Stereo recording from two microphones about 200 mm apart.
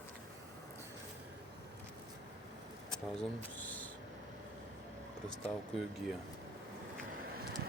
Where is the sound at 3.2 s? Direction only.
10° left (ahead or behind).